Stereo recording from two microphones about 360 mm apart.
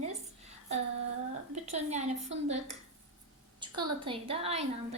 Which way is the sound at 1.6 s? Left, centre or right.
Centre.